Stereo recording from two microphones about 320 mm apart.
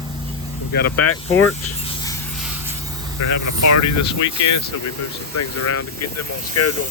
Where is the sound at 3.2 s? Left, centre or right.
Left.